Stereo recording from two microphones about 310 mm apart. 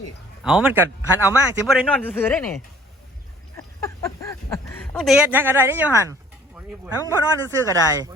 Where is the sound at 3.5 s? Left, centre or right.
Centre.